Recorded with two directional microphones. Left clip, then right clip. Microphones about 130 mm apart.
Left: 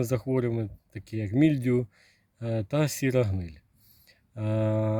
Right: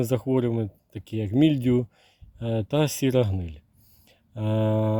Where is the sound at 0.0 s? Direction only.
50° right (ahead or behind).